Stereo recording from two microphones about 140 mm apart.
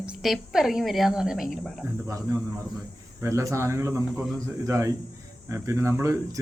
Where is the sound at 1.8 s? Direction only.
20° right (ahead or behind).